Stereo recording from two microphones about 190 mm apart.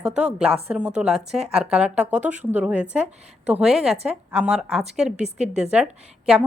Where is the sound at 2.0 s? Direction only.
40° right (ahead or behind).